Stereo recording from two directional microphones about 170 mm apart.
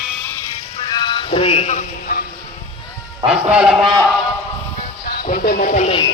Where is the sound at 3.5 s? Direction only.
5° right (ahead or behind).